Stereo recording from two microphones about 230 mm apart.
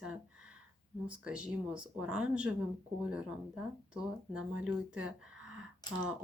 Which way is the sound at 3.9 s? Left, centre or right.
Centre.